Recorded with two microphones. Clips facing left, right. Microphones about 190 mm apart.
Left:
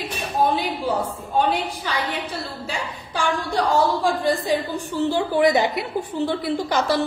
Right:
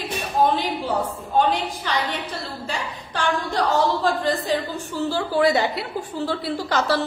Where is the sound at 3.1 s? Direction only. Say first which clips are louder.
Left 1 dB; 10° left (ahead or behind).